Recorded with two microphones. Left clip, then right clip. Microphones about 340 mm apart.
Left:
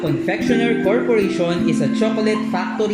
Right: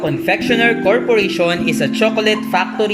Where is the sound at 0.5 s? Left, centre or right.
Right.